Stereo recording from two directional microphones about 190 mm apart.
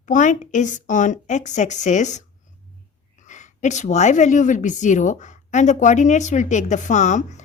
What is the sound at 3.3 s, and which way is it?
A woman's voice, 40° left (ahead or behind).